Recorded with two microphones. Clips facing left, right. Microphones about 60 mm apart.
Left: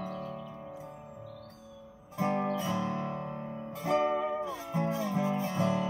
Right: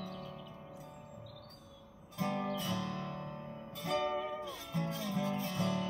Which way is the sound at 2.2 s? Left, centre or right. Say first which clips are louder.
Left 6 dB; left.